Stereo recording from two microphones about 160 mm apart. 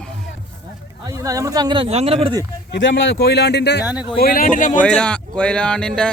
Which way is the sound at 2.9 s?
90° left.